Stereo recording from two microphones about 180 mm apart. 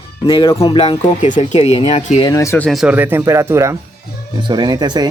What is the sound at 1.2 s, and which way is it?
Speech, 40° left (ahead or behind).